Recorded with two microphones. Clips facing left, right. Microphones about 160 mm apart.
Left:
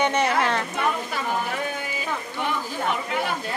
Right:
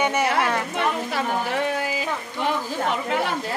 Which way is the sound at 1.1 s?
80° right.